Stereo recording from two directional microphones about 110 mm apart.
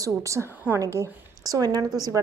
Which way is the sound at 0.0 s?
30° right (ahead or behind).